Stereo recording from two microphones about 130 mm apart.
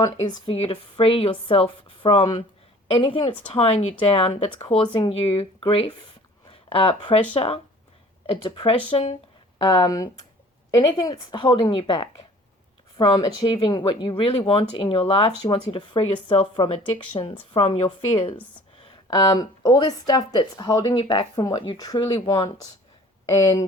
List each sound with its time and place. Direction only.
0.0 s speech: 30° left (ahead or behind)
0.7 s speech: 45° left (ahead or behind)
9.6 s speech: 30° left (ahead or behind)
19.0 s speech: 30° left (ahead or behind)
20.9 s speech: 45° left (ahead or behind); by 23.6 s 25° left (ahead or behind)